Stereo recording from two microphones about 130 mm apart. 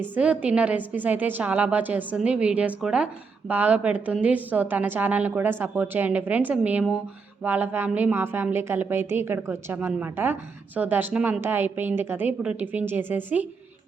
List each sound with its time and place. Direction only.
0.0 s a woman's voice: 10° right (ahead or behind)